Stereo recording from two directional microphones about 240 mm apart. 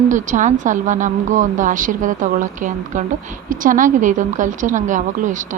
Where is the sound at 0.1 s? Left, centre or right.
Right.